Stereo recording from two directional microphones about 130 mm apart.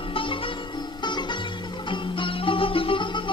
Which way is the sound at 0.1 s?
40° left (ahead or behind).